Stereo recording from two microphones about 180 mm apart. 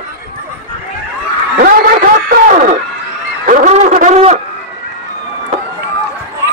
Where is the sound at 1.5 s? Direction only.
50° right (ahead or behind).